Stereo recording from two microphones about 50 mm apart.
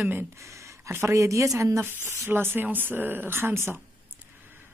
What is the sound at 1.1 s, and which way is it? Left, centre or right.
Speech, right.